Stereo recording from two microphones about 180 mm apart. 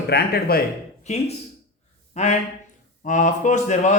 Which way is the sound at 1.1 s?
40° left (ahead or behind).